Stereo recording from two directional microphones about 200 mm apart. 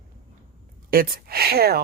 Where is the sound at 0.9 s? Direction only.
50° right (ahead or behind).